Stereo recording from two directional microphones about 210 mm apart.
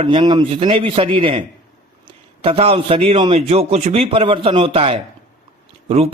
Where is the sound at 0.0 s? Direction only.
25° right (ahead or behind).